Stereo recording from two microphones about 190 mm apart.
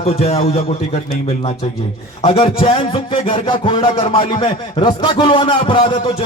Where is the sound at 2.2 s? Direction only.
30° left (ahead or behind).